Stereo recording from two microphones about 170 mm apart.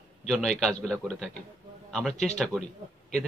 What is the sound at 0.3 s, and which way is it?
A man's voice, centre (ahead or behind).